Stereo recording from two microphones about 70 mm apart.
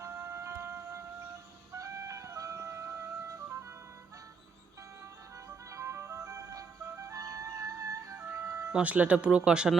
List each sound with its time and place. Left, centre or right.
0.0 s music: right
5.7 s music: right
8.7 s speech: right